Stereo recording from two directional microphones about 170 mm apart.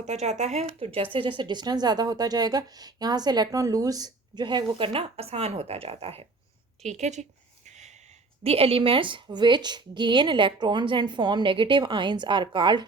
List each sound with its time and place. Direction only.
0.0 s speech: 40° right (ahead or behind)
6.8 s a sound: 40° right (ahead or behind)
8.4 s speech: 35° right (ahead or behind)